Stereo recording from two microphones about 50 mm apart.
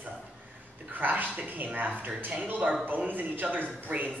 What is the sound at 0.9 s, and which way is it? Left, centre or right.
Speech, right.